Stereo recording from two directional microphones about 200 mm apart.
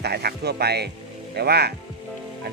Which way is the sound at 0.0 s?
55° right (ahead or behind).